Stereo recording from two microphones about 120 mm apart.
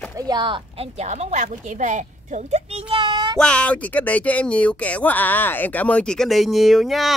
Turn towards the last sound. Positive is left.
turn(degrees=0)  # may be behind; listen again after turning